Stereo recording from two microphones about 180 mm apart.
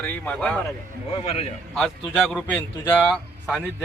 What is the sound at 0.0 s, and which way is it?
Speech, 5° left (ahead or behind).